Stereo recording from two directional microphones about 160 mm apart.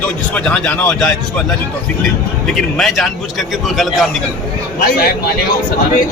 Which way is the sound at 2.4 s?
Centre (ahead or behind).